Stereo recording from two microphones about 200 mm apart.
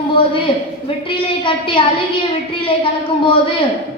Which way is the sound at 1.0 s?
25° left (ahead or behind).